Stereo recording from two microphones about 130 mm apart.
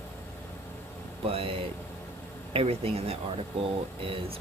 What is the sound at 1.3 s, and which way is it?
Speech, 45° right (ahead or behind).